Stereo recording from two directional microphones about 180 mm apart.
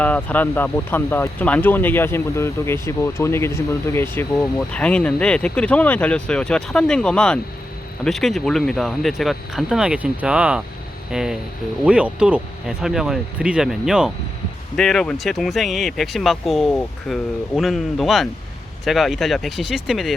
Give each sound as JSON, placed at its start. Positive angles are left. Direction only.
{"t": 0.0, "sound": "speech", "side_deg": 10}